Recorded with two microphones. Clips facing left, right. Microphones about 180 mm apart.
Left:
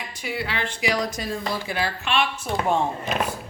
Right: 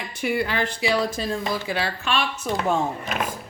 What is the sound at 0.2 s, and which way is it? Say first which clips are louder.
Speech: right 5 dB; 55° right (ahead or behind).